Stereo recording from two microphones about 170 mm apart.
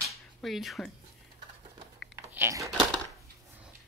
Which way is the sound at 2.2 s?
15° right (ahead or behind).